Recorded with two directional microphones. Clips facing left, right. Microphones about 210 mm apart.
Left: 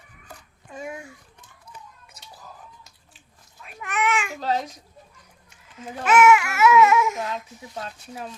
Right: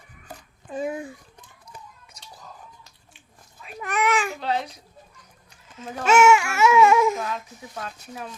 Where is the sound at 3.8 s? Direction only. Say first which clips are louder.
Right 2 dB; 35° right (ahead or behind).